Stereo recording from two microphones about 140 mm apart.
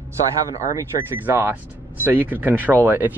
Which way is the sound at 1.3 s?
15° right (ahead or behind).